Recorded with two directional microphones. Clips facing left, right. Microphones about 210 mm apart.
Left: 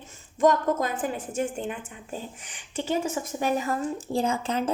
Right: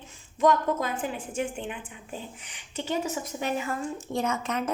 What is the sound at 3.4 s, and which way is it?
A woman's voice, 40° left (ahead or behind).